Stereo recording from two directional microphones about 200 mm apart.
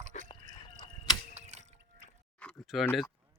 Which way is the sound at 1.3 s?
35° right (ahead or behind).